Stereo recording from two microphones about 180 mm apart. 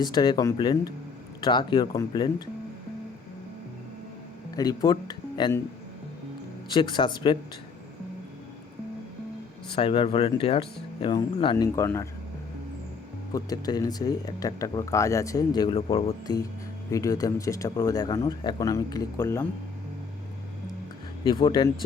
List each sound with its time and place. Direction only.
0.0 s speech: 25° left (ahead or behind)
4.5 s speech: 20° left (ahead or behind)
6.7 s speech: 25° left (ahead or behind)
9.7 s speech: 30° left (ahead or behind)
11.5 s speech: 15° left (ahead or behind)
13.3 s speech: 20° left (ahead or behind)
16.9 s speech: 20° left (ahead or behind)
21.2 s speech: 30° left (ahead or behind)